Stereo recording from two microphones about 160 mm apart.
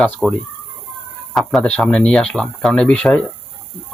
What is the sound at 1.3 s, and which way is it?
Speech, centre (ahead or behind).